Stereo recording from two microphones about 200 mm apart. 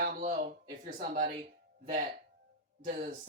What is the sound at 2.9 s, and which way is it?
Speech, 40° right (ahead or behind).